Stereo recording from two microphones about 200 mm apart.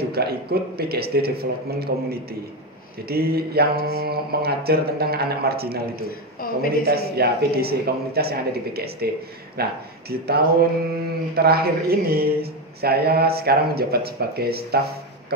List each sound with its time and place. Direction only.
0.1 s mantra: 50° right (ahead or behind)
6.0 s a man's voice: 50° left (ahead or behind)
6.9 s mantra: 50° right (ahead or behind)
9.6 s speech: 50° right (ahead or behind)
11.3 s mantra: 50° right (ahead or behind)